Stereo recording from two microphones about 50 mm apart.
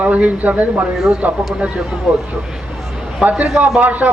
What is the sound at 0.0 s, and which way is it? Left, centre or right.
A man's voice, right.